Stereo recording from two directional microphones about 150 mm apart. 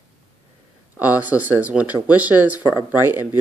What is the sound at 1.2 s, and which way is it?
Speech, 10° right (ahead or behind).